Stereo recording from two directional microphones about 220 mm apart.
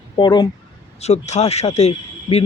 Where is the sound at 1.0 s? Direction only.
30° left (ahead or behind).